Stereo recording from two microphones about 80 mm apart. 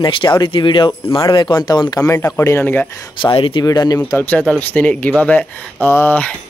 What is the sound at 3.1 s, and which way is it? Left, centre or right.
Speech, left.